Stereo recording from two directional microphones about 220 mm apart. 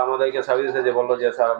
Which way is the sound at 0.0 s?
15° right (ahead or behind).